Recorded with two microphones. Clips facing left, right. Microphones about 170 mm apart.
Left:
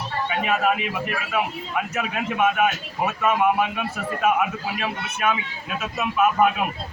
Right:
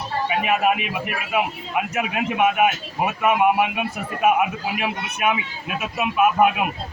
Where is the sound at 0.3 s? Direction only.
15° right (ahead or behind).